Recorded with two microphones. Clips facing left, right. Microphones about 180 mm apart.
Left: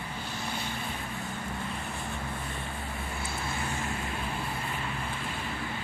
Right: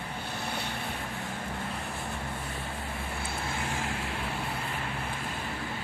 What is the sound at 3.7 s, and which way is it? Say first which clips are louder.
Vehicle: right 1 dB; 90° right.